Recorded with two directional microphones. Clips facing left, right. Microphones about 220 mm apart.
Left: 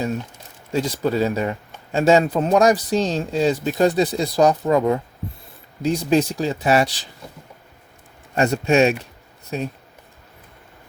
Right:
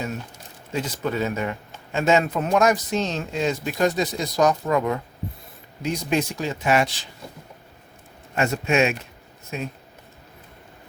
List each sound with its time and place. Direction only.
0.7 s speech: 35° left (ahead or behind)
8.4 s speech: 35° left (ahead or behind)